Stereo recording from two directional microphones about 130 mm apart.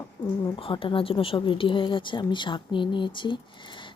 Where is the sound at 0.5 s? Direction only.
45° left (ahead or behind).